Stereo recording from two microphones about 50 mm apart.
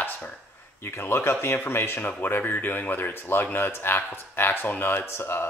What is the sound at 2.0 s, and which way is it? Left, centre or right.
A man's voice, left.